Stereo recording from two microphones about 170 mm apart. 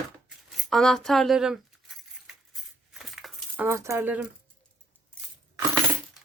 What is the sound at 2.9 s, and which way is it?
Keys jangling, centre (ahead or behind).